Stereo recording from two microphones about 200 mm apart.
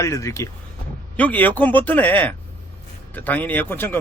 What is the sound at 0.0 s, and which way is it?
Speech, 15° left (ahead or behind).